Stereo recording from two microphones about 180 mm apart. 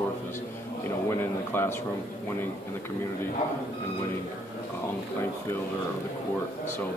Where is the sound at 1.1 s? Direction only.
15° left (ahead or behind).